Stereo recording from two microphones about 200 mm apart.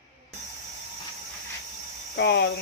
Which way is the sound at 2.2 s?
55° left (ahead or behind).